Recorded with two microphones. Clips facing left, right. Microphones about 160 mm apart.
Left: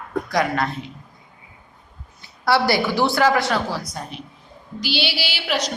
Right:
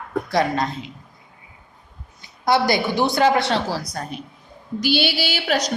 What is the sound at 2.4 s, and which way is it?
Speech, 20° right (ahead or behind).